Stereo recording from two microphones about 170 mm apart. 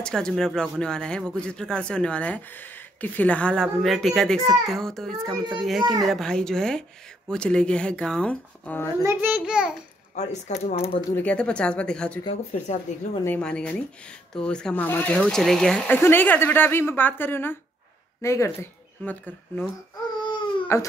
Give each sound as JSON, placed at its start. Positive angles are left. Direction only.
{"t": 0.0, "sound": "a child's voice", "side_deg": 5}
{"t": 9.0, "sound": "a child's voice", "side_deg": -10}
{"t": 10.1, "sound": "speech", "side_deg": 40}
{"t": 11.1, "sound": "a woman's voice", "side_deg": 5}
{"t": 12.9, "sound": "a woman's voice", "side_deg": 45}
{"t": 13.2, "sound": "a woman's voice", "side_deg": 10}
{"t": 20.7, "sound": "a woman's voice", "side_deg": 15}